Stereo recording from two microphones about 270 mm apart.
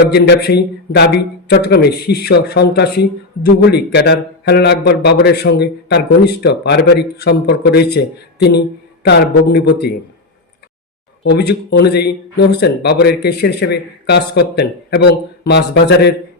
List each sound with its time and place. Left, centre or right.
0.1 s speech: left
11.2 s speech: left